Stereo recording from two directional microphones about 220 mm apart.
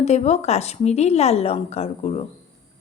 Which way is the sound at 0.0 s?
30° left (ahead or behind).